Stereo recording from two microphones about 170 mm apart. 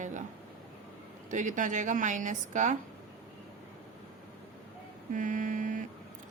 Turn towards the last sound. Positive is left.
turn(degrees=-50)  # may be behind; listen again after turning